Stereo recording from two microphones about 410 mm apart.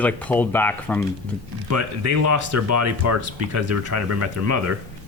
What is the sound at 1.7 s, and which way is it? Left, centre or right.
Speech, right.